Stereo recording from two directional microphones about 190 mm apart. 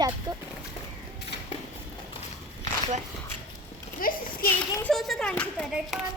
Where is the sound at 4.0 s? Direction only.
50° left (ahead or behind).